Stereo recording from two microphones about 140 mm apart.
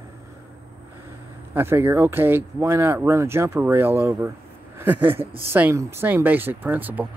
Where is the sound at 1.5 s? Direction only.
15° right (ahead or behind).